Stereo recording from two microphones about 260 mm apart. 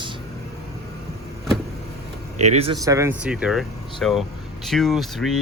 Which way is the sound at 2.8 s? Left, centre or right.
Centre.